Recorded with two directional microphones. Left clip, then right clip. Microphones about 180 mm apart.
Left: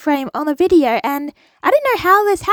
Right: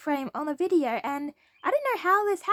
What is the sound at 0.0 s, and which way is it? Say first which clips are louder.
A woman's voice: left 11 dB; 45° left (ahead or behind).